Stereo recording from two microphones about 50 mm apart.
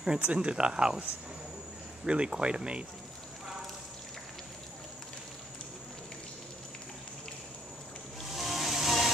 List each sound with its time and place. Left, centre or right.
0.2 s speech: right
2.0 s speech: centre
8.2 s a sound: centre